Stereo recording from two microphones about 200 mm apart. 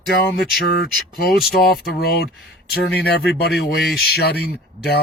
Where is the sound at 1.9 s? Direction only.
50° left (ahead or behind).